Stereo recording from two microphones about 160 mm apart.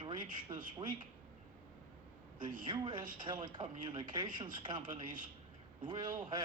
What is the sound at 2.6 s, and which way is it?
Speech, 30° right (ahead or behind).